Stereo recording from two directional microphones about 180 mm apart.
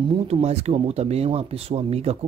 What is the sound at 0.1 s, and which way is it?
Speech, 35° right (ahead or behind).